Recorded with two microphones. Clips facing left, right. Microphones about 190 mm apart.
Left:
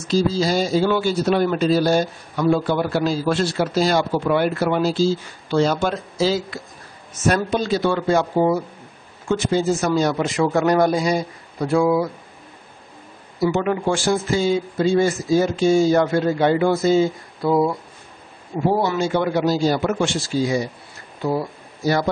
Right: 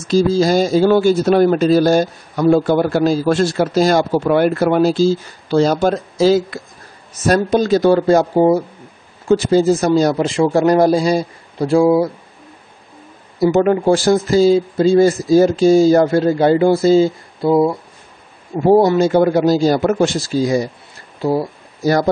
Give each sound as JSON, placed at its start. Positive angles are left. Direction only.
{"t": 0.1, "sound": "speech", "side_deg": -50}
{"t": 13.4, "sound": "speech", "side_deg": -40}
{"t": 17.5, "sound": "speech", "side_deg": -20}
{"t": 18.7, "sound": "speech", "side_deg": -40}